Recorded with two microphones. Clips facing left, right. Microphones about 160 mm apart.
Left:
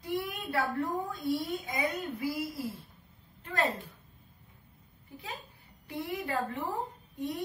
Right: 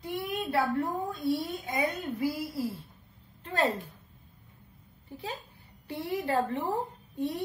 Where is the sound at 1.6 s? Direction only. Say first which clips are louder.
Right 2 dB; 30° right (ahead or behind).